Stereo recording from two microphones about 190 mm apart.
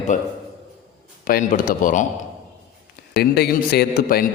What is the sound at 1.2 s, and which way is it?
Speech, 45° left (ahead or behind).